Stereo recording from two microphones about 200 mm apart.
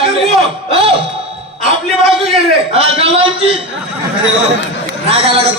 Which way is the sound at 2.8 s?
30° right (ahead or behind).